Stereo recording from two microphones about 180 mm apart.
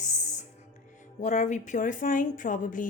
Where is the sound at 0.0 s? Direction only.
45° left (ahead or behind).